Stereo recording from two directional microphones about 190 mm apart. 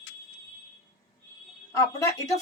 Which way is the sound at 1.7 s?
20° left (ahead or behind).